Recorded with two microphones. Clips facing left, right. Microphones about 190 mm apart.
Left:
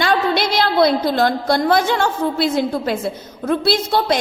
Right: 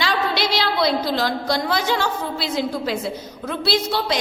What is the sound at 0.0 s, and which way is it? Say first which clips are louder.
A woman's voice: left 5 dB; 50° left (ahead or behind).